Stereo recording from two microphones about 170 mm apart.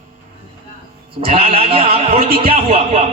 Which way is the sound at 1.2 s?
35° right (ahead or behind).